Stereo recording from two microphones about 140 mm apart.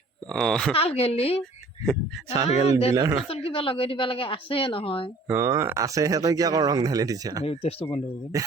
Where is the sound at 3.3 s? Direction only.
40° left (ahead or behind).